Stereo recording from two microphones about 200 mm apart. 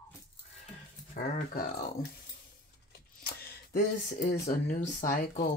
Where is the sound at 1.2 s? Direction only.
50° left (ahead or behind).